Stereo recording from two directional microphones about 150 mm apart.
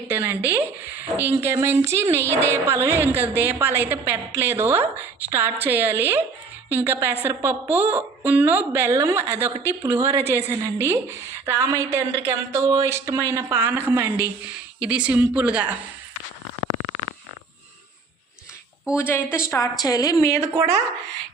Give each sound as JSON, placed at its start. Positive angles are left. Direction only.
{"t": 0.1, "sound": "a sound", "side_deg": -15}
{"t": 1.2, "sound": "a woman's voice", "side_deg": -15}
{"t": 18.9, "sound": "speech", "side_deg": 15}
{"t": 20.5, "sound": "speech", "side_deg": -20}